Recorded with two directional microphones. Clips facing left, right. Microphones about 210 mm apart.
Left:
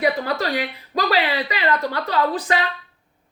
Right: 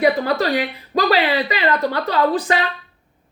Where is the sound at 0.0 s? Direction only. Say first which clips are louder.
Right 4 dB; 25° right (ahead or behind).